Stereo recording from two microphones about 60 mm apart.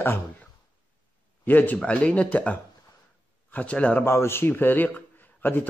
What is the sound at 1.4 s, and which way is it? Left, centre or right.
Speech, left.